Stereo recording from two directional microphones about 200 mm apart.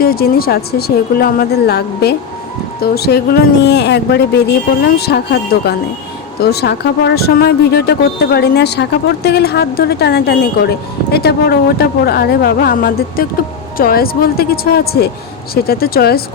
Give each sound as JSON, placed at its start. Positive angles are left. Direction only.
{"t": 0.0, "sound": "speech", "side_deg": 50}